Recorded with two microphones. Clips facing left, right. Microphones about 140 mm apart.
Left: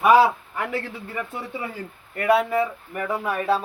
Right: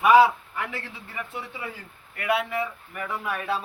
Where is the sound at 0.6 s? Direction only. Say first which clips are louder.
Left 7 dB; 50° left (ahead or behind).